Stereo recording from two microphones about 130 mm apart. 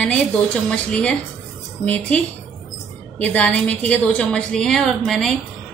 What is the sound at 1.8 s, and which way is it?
A woman's voice, 10° left (ahead or behind).